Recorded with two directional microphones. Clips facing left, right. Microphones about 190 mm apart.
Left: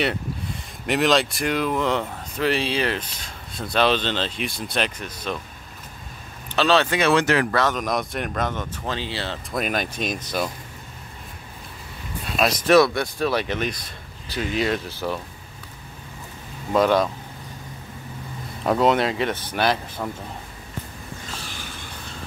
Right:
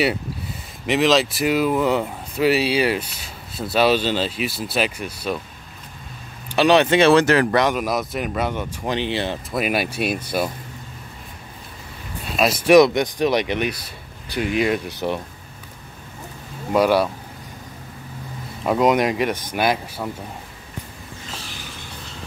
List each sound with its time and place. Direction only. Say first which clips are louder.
0.8 s speech: right 2 dB; centre (ahead or behind)
6.5 s speech: right 4 dB; 15° right (ahead or behind)
7.0 s speech: right 5 dB; 35° right (ahead or behind)
7.5 s speech: right 3 dB; 10° right (ahead or behind)
9.5 s speech: right 1 dB; 5° right (ahead or behind)
12.3 s speech: right 3 dB; 5° right (ahead or behind)
16.7 s speech: right 2 dB; 10° right (ahead or behind)
18.7 s speech: right 2 dB; 10° right (ahead or behind)